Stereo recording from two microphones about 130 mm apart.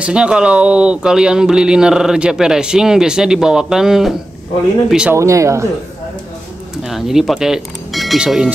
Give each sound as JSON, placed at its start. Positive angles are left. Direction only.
{"t": 0.0, "sound": "speech", "side_deg": -10}
{"t": 5.1, "sound": "speech", "side_deg": -25}
{"t": 6.8, "sound": "speech", "side_deg": 0}